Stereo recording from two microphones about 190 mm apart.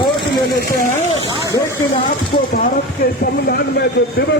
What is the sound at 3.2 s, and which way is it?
Speech, 55° left (ahead or behind).